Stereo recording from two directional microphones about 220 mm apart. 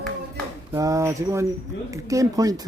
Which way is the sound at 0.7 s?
15° right (ahead or behind).